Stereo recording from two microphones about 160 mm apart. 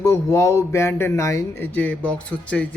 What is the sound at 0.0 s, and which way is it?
Speech, 20° left (ahead or behind).